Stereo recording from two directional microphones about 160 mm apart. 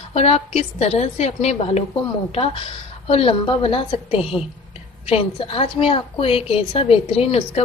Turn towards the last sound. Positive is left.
turn(degrees=40)  # may be behind; listen again after turning